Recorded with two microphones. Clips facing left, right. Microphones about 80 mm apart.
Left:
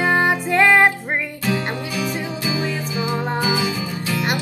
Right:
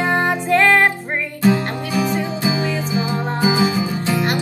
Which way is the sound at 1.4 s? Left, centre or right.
Right.